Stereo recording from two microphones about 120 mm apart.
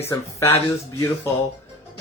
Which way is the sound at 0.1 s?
25° left (ahead or behind).